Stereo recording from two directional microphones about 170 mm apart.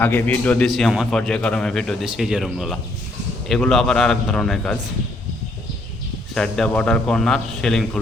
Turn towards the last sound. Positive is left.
turn(degrees=5)  # may be behind; listen again after turning